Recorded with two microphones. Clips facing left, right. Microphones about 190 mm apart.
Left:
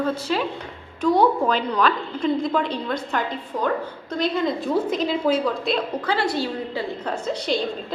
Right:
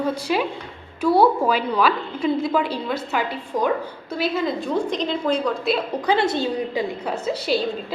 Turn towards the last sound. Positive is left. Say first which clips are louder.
# right 2 dB
turn(degrees=-5)  # may be behind; listen again after turning